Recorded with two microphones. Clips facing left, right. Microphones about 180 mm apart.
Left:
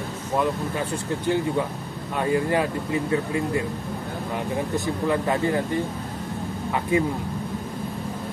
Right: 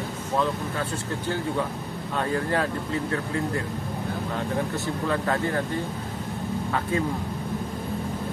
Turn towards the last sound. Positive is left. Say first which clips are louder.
# left 4 dB
turn(degrees=15)  # may be behind; listen again after turning